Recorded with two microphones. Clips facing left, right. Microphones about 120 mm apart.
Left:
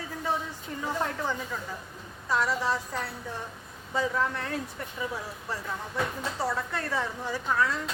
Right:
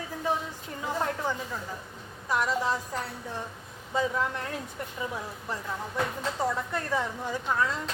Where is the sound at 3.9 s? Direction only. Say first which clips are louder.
Even; 15° right (ahead or behind).